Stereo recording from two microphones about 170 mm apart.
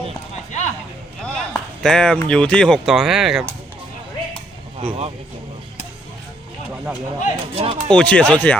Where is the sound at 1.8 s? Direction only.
5° left (ahead or behind).